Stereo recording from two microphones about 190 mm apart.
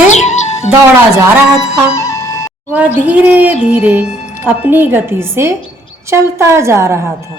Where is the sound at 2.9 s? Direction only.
5° right (ahead or behind).